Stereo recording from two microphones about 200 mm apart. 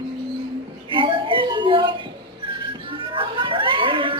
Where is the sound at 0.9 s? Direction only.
25° right (ahead or behind).